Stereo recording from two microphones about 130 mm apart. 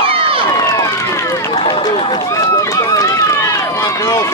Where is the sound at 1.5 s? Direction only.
40° left (ahead or behind).